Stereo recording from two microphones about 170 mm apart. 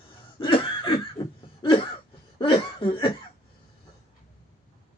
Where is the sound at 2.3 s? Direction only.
30° left (ahead or behind).